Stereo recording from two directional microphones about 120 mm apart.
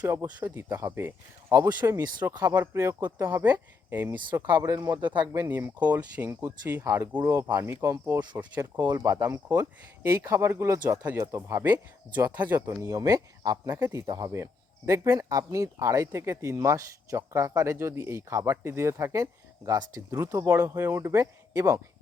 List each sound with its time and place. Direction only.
0.0 s speech: 15° right (ahead or behind)
4.4 s speech: 35° right (ahead or behind)
5.5 s speech: 15° right (ahead or behind)
7.1 s speech: 15° right (ahead or behind)
7.3 s speech: 25° right (ahead or behind)
8.8 s speech: 30° right (ahead or behind)
13.7 s speech: 20° right (ahead or behind)
14.1 s speech: 30° right (ahead or behind)